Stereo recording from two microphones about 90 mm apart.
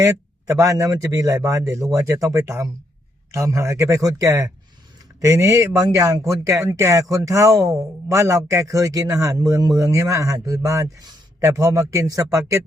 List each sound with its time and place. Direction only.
0.0 s speech: 35° right (ahead or behind)